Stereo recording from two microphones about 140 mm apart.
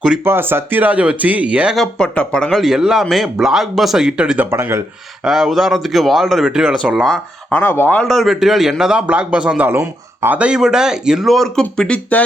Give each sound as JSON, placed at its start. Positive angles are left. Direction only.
{"t": 0.3, "sound": "speech", "side_deg": -15}
{"t": 4.5, "sound": "speech", "side_deg": -20}
{"t": 5.2, "sound": "speech", "side_deg": -5}
{"t": 7.6, "sound": "speech", "side_deg": 15}
{"t": 8.0, "sound": "speech", "side_deg": 0}